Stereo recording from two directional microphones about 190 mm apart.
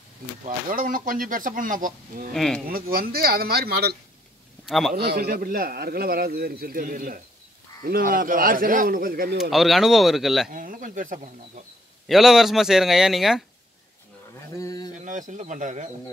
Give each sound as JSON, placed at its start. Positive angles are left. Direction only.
{"t": 0.7, "sound": "a man's voice", "side_deg": -45}
{"t": 2.3, "sound": "speech", "side_deg": 0}
{"t": 2.7, "sound": "a man's voice", "side_deg": -50}
{"t": 4.6, "sound": "a man's voice", "side_deg": 0}
{"t": 4.9, "sound": "a man's voice", "side_deg": -55}
{"t": 9.4, "sound": "speech", "side_deg": 0}
{"t": 10.5, "sound": "a man's voice", "side_deg": -45}
{"t": 12.1, "sound": "speech", "side_deg": 0}
{"t": 14.5, "sound": "a sound", "side_deg": 15}
{"t": 15.0, "sound": "speech", "side_deg": -40}